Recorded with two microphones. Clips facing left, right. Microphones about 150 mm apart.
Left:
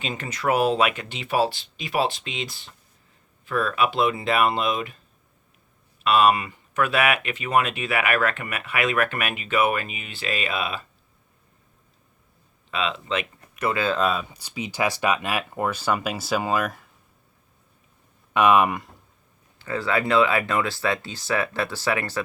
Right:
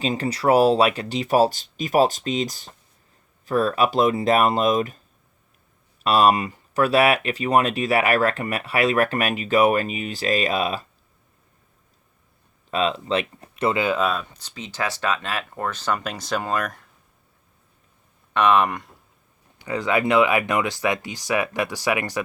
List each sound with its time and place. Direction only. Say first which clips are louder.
0.0 s speech: right 6 dB; 35° right (ahead or behind)
6.0 s speech: right 1 dB; 40° right (ahead or behind)
12.7 s speech: right 4 dB; 40° right (ahead or behind)
13.8 s speech: right 1 dB; 10° right (ahead or behind)
14.1 s speech: even; 5° left (ahead or behind)
18.3 s speech: even; 10° left (ahead or behind)
19.5 s speech: right 2 dB; 15° right (ahead or behind)